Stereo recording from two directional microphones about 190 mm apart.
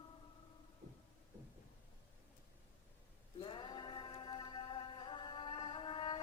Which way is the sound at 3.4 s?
25° left (ahead or behind).